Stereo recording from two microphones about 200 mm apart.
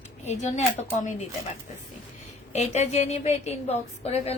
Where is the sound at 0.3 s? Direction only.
35° left (ahead or behind).